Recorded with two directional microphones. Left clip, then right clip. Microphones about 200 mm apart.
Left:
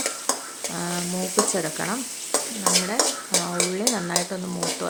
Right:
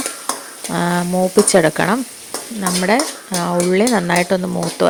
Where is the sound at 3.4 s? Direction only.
40° right (ahead or behind).